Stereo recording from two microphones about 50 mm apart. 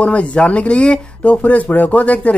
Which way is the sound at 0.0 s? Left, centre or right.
Left.